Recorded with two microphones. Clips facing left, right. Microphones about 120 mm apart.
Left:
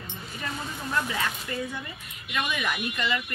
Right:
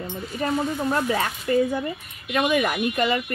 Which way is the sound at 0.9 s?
45° right (ahead or behind).